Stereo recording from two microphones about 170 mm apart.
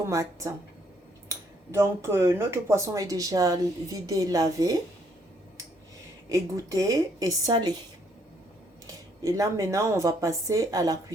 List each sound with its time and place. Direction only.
0.0 s speech: 20° right (ahead or behind)
6.2 s speech: 20° right (ahead or behind)
9.2 s speech: 20° right (ahead or behind)